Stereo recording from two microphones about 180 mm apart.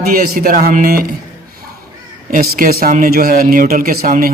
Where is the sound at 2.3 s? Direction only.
55° right (ahead or behind).